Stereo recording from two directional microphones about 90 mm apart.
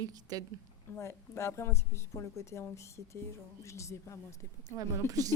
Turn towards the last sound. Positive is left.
turn(degrees=-40)  # may be behind; listen again after turning